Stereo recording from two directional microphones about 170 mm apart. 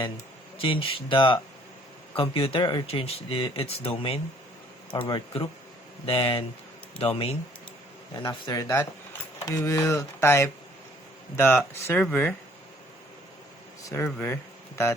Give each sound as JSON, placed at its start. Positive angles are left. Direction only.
{"t": 0.6, "sound": "speech", "side_deg": 30}
{"t": 8.1, "sound": "speech", "side_deg": 25}
{"t": 13.8, "sound": "speech", "side_deg": 15}